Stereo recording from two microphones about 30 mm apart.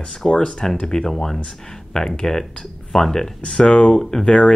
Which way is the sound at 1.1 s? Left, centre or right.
Centre.